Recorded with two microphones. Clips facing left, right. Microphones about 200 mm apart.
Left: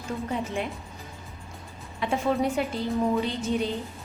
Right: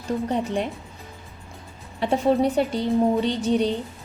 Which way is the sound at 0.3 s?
35° right (ahead or behind).